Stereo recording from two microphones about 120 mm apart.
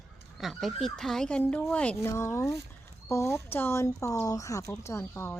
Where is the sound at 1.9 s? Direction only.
20° left (ahead or behind).